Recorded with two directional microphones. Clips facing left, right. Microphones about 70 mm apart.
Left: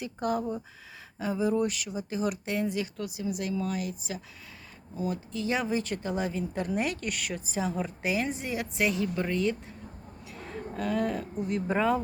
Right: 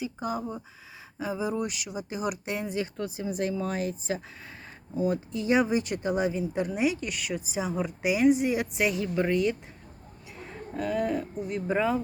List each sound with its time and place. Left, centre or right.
0.0 s a woman's voice: centre; by 4.2 s right
4.9 s a woman's voice: right
10.8 s speech: centre